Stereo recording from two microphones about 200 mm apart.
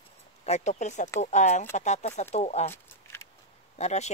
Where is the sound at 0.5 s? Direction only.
35° left (ahead or behind).